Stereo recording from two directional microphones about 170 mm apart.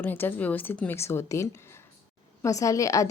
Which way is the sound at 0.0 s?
10° left (ahead or behind).